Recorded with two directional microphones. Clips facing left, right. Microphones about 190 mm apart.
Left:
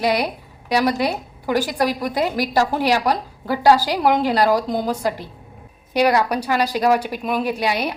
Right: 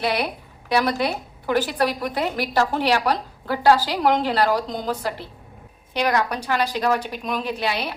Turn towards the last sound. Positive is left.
turn(degrees=15)  # may be behind; listen again after turning